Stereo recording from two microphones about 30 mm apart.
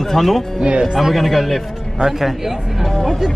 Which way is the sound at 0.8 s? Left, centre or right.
Centre.